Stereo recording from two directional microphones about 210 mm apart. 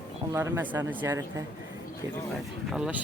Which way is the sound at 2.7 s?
5° right (ahead or behind).